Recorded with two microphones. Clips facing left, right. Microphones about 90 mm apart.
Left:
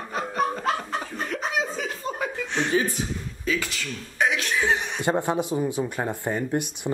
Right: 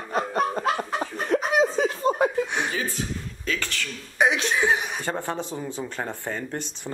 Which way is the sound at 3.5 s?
10° left (ahead or behind).